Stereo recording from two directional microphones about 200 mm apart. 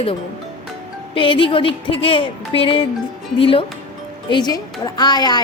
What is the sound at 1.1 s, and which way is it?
A woman's voice, 25° left (ahead or behind).